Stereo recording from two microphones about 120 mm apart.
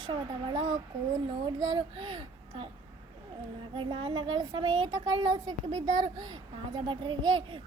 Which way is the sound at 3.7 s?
45° right (ahead or behind).